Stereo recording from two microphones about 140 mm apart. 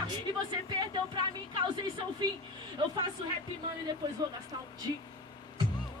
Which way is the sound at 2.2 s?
30° right (ahead or behind).